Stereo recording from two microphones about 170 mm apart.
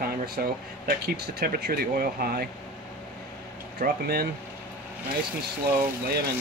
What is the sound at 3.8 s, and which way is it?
Speech, 65° right (ahead or behind).